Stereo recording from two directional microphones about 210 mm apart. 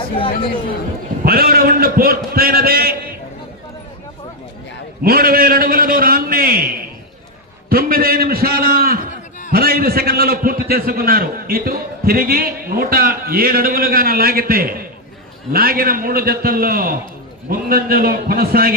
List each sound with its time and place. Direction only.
1.2 s a man's voice: 45° right (ahead or behind)
5.0 s a sound: 45° right (ahead or behind)
7.7 s a man's voice: 45° right (ahead or behind)